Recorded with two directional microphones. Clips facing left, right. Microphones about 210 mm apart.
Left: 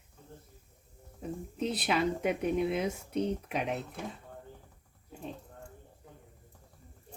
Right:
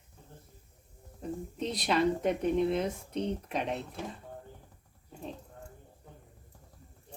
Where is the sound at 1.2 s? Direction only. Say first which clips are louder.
Left 1 dB; 5° left (ahead or behind).